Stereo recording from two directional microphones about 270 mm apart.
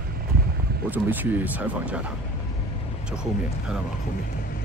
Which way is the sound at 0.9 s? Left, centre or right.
Centre.